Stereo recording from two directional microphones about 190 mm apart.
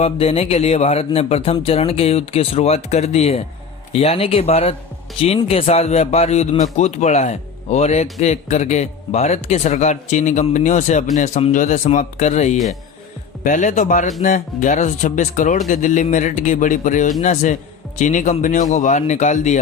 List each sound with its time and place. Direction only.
0.0 s speech: 30° left (ahead or behind)